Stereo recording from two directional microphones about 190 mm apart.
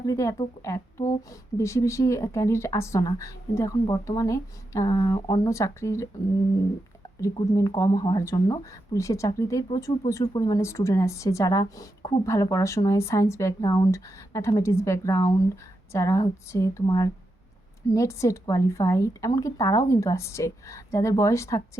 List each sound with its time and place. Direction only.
0.0 s speech: 15° left (ahead or behind)
7.2 s speech: 15° left (ahead or behind)
12.2 s speech: 15° left (ahead or behind)